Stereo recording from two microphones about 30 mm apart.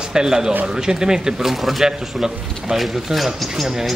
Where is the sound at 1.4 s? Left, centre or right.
Centre.